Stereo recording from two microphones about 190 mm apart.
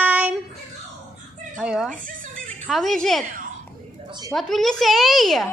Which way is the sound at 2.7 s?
Centre (ahead or behind).